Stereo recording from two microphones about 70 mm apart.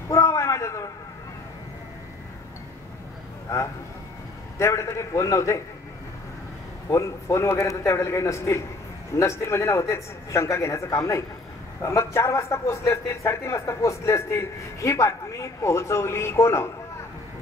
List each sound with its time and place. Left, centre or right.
0.1 s a sound: left
3.5 s a man's voice: left
6.9 s a man's voice: left